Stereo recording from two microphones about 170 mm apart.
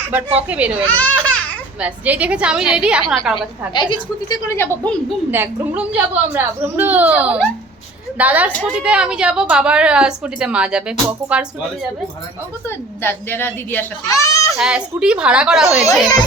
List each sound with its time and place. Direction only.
0.1 s speech: 10° right (ahead or behind)
0.9 s a sound: 10° left (ahead or behind)
1.8 s speech: 10° right (ahead or behind)
3.8 s a woman's voice: 25° left (ahead or behind)
4.4 s a child's voice: 15° left (ahead or behind)
5.3 s a woman's voice: 10° right (ahead or behind)
12.6 s a child's voice: 15° left (ahead or behind)
14.5 s a woman's voice: centre (ahead or behind)